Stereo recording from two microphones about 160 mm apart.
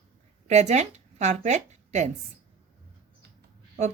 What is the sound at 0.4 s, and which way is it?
Speech, 45° right (ahead or behind).